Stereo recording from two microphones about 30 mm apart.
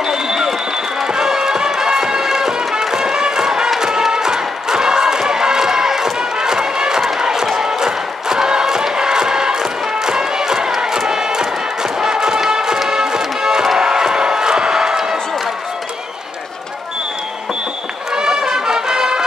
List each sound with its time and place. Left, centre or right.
0.0 s a sound: centre
1.0 s music: right
3.8 s crowd: right
7.2 s music: centre
7.6 s crowd: centre
10.8 s music: centre
18.1 s music: right